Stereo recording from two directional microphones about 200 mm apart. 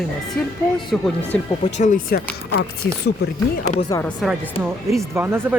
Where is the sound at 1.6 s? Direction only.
40° left (ahead or behind).